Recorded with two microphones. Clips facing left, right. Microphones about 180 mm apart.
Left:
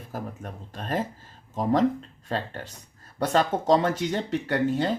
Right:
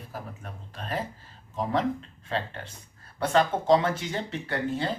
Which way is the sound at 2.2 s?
40° left (ahead or behind).